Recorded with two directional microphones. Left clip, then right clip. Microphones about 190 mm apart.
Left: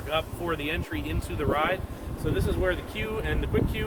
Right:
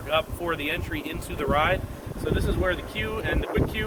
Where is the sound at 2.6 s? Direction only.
10° left (ahead or behind).